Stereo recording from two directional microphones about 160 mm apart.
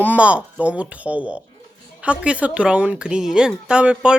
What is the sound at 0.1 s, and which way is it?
A woman's voice, 10° right (ahead or behind).